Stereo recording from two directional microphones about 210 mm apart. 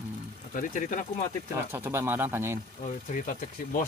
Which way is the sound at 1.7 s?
10° right (ahead or behind).